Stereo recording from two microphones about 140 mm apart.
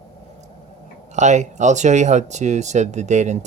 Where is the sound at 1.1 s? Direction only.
60° right (ahead or behind).